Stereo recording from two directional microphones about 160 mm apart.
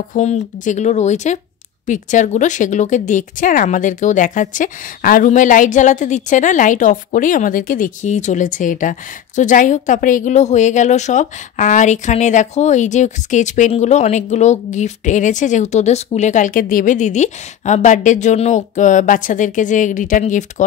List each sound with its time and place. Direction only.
0.1 s speech: 50° left (ahead or behind)